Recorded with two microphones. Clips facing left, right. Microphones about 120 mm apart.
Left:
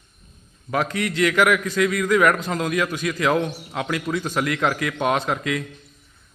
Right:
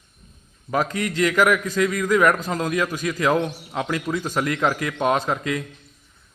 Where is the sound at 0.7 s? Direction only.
5° right (ahead or behind).